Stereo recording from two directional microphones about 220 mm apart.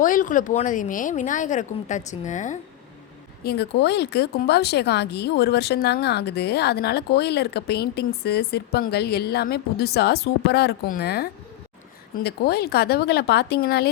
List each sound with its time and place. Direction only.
0.0 s speech: 35° left (ahead or behind)
3.4 s speech: 45° left (ahead or behind)